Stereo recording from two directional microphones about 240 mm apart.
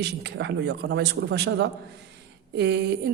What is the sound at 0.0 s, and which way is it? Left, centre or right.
A woman's voice, right.